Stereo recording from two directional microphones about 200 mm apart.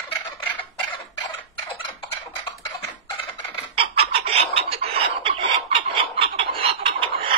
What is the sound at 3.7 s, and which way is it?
Chicken, 30° right (ahead or behind).